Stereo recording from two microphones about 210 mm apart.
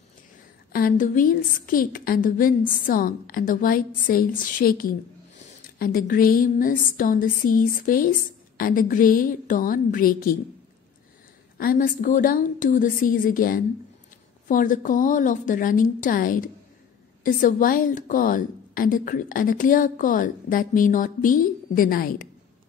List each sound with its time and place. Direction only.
0.7 s a woman's voice: 40° left (ahead or behind)
11.5 s a woman's voice: 45° left (ahead or behind)